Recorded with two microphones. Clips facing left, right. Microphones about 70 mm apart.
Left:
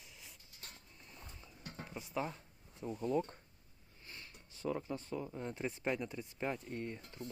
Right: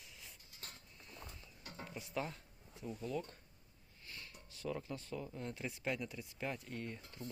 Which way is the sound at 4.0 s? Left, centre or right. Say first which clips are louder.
Even; left.